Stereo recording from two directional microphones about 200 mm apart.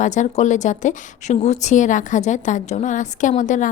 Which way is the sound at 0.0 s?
40° left (ahead or behind).